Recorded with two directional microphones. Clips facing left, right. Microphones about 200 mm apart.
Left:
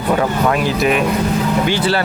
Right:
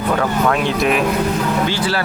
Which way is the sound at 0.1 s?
15° left (ahead or behind).